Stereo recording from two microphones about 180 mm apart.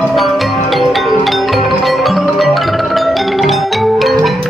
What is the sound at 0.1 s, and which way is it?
Music, centre (ahead or behind).